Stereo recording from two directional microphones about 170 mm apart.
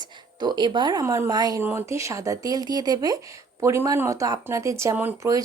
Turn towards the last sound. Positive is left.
turn(degrees=-20)  # may be behind; listen again after turning